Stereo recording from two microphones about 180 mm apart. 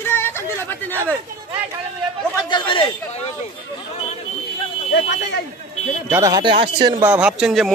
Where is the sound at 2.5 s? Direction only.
25° left (ahead or behind).